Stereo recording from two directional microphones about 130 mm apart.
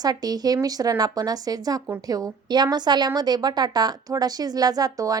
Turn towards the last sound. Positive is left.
turn(degrees=-30)  # may be behind; listen again after turning